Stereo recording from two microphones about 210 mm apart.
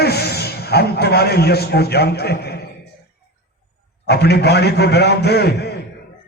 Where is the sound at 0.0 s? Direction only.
50° left (ahead or behind).